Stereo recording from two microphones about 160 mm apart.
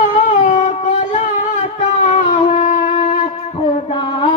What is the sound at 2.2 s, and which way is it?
Wind instrument, 35° left (ahead or behind).